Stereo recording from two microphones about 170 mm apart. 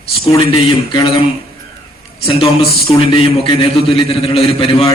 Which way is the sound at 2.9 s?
35° left (ahead or behind).